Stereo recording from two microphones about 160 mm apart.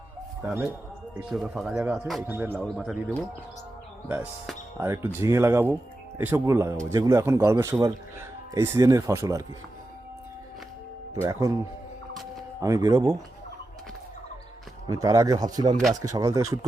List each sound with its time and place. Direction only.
0.4 s speech: 10° right (ahead or behind)
4.8 s speech: 15° right (ahead or behind)
11.1 s speech: 20° right (ahead or behind)
12.6 s speech: 20° right (ahead or behind)
14.9 s speech: 20° right (ahead or behind)